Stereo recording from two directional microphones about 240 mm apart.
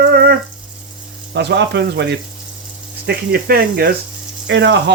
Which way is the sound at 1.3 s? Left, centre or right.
Right.